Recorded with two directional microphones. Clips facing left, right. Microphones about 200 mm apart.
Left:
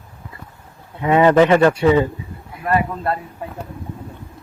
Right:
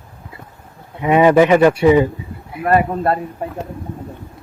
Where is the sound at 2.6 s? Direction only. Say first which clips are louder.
Right 4 dB; 45° right (ahead or behind).